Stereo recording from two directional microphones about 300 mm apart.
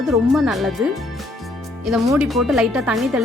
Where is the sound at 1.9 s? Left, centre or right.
Centre.